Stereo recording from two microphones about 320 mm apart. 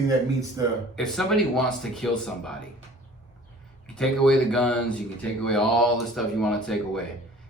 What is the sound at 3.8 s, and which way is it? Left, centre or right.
Speech, centre.